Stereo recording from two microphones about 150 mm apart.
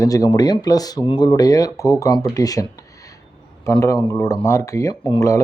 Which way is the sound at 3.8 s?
20° left (ahead or behind).